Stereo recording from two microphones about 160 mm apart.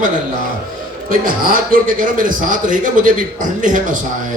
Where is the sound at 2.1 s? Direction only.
55° right (ahead or behind).